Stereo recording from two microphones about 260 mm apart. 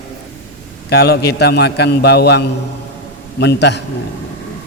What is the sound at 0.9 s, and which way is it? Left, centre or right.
A man's voice, left.